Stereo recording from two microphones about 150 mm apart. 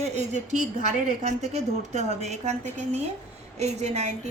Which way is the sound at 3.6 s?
45° right (ahead or behind).